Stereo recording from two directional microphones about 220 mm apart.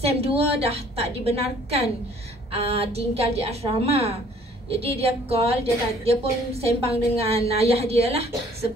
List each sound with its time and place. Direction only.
0.0 s a woman's voice: 25° right (ahead or behind)